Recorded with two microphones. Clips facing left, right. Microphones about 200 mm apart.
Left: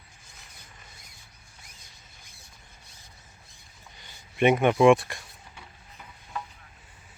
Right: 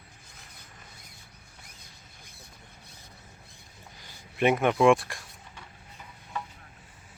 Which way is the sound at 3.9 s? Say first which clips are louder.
Left 3 dB; centre (ahead or behind).